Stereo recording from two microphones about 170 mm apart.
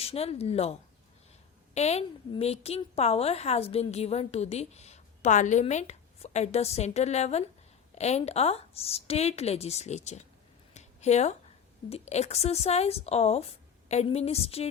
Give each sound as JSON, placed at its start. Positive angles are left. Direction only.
{"t": 0.0, "sound": "a woman's voice", "side_deg": 35}
{"t": 10.8, "sound": "a sound", "side_deg": 40}
{"t": 11.9, "sound": "a woman's voice", "side_deg": 40}